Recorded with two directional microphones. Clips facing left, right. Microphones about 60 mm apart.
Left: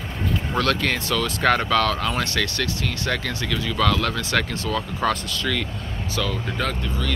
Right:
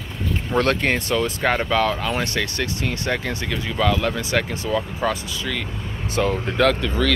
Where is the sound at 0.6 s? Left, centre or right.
Right.